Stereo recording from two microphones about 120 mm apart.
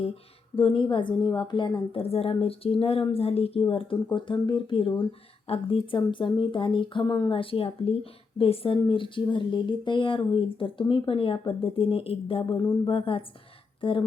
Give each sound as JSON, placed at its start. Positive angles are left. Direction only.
{"t": 0.5, "sound": "a woman's voice", "side_deg": 45}
{"t": 7.3, "sound": "a woman's voice", "side_deg": 50}
{"t": 12.5, "sound": "music", "side_deg": 35}
{"t": 12.9, "sound": "a woman's voice", "side_deg": 50}